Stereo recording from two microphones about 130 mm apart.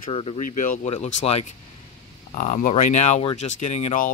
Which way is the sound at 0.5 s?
85° left.